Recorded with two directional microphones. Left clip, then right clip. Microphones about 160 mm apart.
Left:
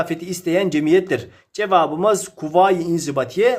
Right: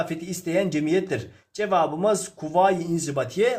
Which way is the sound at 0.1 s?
45° left (ahead or behind).